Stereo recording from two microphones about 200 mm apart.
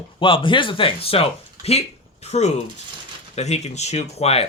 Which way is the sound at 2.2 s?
35° left (ahead or behind).